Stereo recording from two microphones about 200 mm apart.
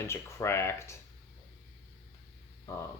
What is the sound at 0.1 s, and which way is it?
Speech, 15° left (ahead or behind).